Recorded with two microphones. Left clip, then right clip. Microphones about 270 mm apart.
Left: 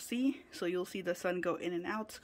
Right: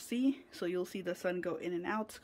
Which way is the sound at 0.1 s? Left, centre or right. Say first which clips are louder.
Right 1 dB; centre.